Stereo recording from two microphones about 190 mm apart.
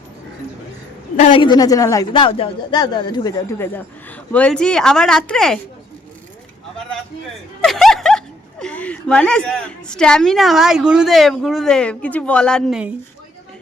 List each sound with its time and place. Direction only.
1.3 s speech: 25° left (ahead or behind); by 5.5 s 5° left (ahead or behind)
7.6 s a woman's voice: centre (ahead or behind)